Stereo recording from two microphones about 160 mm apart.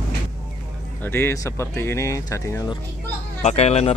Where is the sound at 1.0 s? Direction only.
15° left (ahead or behind).